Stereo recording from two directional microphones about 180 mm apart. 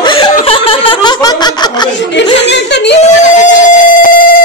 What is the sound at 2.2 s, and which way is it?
Speech, 75° left (ahead or behind).